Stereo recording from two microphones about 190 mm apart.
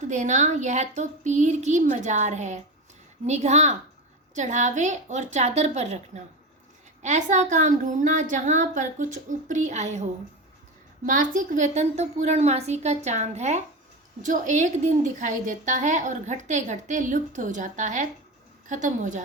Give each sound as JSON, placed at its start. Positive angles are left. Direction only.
{"t": 0.0, "sound": "a woman's voice", "side_deg": -40}